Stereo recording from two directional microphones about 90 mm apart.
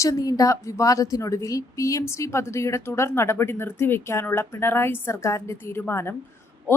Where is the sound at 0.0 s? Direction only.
40° left (ahead or behind).